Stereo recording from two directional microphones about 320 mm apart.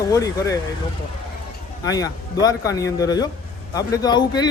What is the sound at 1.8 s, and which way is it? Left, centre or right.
Speech, centre.